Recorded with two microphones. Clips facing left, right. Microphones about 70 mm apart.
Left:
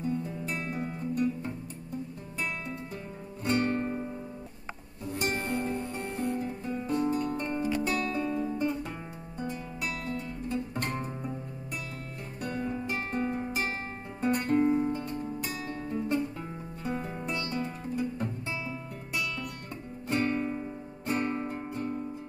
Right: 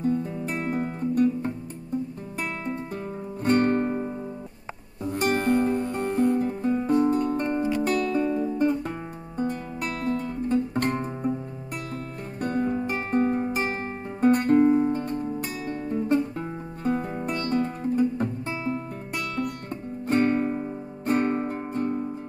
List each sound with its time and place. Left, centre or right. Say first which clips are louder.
0.0 s guitar: right 7 dB; right
3.4 s music: right 7 dB; right
9.4 s guitar: right 7 dB; right
12.4 s music: right 8 dB; right
17.3 s guitar: right 8 dB; right
21.7 s music: right 8 dB; right